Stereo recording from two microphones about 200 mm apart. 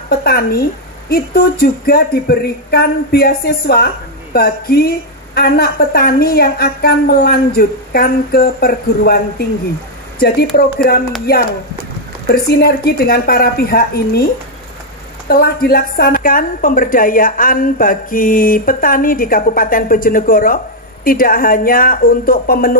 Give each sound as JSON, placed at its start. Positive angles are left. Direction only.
{"t": 0.2, "sound": "a woman's voice", "side_deg": 50}
{"t": 10.5, "sound": "a woman's voice", "side_deg": 50}
{"t": 15.2, "sound": "a woman's voice", "side_deg": 50}